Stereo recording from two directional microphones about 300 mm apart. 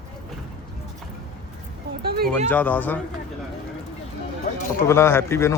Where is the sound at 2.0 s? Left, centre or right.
Right.